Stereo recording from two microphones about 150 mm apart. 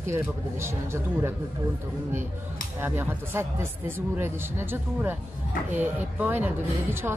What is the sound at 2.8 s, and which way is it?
Speech, 15° right (ahead or behind).